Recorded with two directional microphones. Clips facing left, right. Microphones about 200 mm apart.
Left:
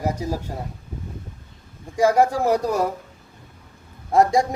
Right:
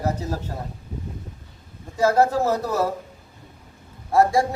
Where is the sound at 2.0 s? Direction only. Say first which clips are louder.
Left 1 dB; 15° left (ahead or behind).